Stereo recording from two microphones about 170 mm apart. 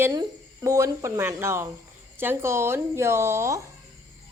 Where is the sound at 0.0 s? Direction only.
20° right (ahead or behind).